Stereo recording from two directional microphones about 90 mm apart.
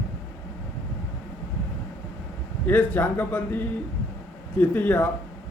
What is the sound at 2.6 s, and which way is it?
Speech, 20° left (ahead or behind).